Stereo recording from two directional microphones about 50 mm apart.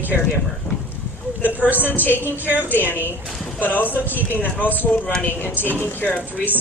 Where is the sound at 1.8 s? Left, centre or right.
Left.